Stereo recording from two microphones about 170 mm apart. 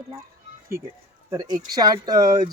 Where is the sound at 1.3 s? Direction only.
25° right (ahead or behind).